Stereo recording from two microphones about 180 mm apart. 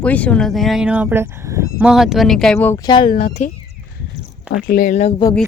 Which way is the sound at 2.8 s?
25° left (ahead or behind).